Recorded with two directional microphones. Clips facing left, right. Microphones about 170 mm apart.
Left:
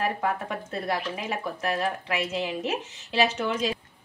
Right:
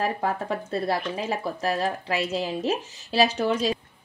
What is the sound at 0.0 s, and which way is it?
A woman's voice, 35° right (ahead or behind).